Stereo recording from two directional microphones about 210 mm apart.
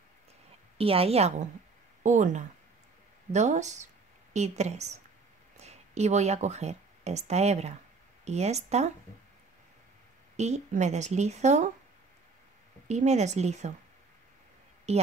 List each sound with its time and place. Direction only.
0.7 s a woman's voice: 25° right (ahead or behind)
10.3 s speech: 30° right (ahead or behind)
12.8 s speech: 30° right (ahead or behind)
14.9 s speech: 30° right (ahead or behind)